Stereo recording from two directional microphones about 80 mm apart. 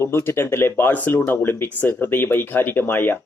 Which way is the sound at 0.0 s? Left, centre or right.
Left.